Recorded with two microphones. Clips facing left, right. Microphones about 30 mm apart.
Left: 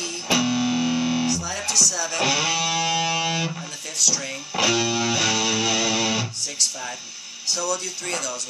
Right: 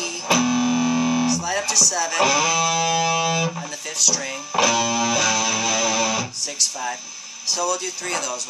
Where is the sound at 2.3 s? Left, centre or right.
Left.